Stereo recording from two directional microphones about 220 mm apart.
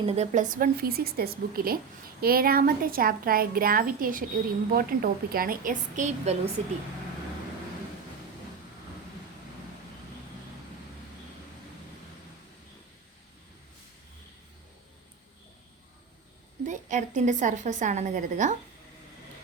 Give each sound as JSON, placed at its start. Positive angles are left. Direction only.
{"t": 0.0, "sound": "a woman's voice", "side_deg": -30}
{"t": 16.6, "sound": "a woman's voice", "side_deg": -35}